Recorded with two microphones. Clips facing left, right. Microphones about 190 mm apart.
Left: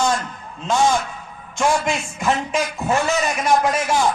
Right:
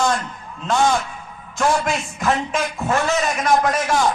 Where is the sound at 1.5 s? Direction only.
Centre (ahead or behind).